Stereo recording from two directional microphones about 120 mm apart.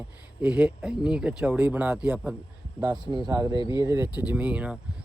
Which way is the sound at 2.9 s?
40° right (ahead or behind).